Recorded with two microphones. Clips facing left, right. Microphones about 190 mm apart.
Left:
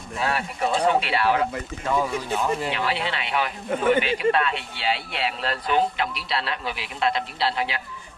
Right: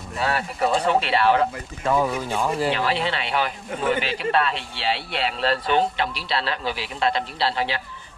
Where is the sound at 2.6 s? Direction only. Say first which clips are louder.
Right 4 dB; 30° right (ahead or behind).